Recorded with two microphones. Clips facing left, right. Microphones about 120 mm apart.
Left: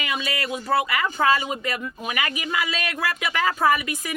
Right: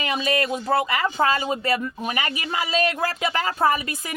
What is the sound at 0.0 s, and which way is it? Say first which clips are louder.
Speech: right 5 dB; 35° right (ahead or behind).